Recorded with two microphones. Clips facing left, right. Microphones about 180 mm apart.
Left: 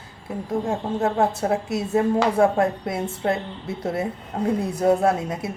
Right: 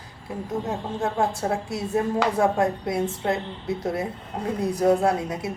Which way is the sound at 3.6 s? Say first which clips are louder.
Left 1 dB; 25° left (ahead or behind).